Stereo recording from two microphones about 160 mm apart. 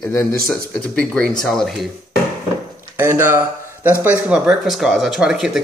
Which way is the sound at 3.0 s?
15° right (ahead or behind).